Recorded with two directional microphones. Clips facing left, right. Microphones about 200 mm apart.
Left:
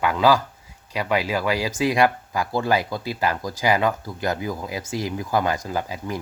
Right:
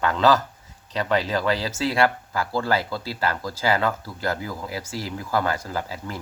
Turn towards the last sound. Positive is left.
turn(degrees=15)  # may be behind; listen again after turning